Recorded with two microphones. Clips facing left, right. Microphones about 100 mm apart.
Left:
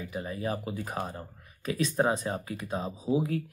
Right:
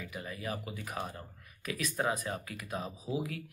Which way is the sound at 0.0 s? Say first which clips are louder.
Left 7 dB; 30° left (ahead or behind).